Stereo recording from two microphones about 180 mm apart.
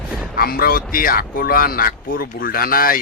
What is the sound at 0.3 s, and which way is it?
Speech, 55° left (ahead or behind).